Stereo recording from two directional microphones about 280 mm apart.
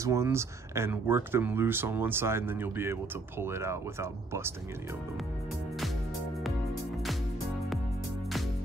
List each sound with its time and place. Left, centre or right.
0.0 s speech: centre